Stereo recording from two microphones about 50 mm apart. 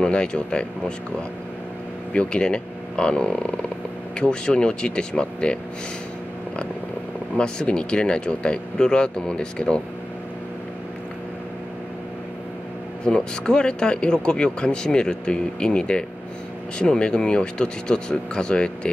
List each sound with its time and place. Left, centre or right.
0.0 s speech: centre
2.1 s speech: left
7.3 s speech: centre
13.0 s speech: centre